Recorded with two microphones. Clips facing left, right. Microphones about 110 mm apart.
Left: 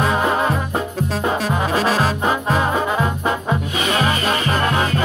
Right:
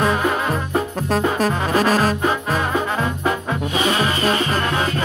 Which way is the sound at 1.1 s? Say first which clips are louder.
Right 3 dB; 45° right (ahead or behind).